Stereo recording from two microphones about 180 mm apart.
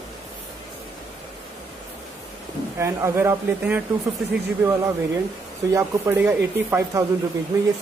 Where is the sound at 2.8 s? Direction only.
15° right (ahead or behind).